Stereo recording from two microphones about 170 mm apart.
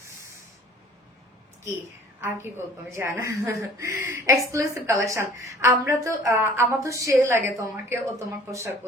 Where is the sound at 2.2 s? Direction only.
15° right (ahead or behind).